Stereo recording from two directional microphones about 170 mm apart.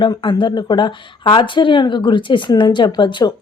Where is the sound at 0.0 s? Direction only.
25° left (ahead or behind).